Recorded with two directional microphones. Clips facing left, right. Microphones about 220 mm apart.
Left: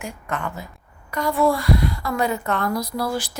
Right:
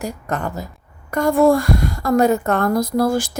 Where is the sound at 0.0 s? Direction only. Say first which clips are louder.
Right 5 dB; 40° right (ahead or behind).